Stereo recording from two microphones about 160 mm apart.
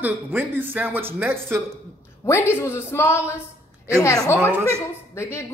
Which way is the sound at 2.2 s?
15° left (ahead or behind).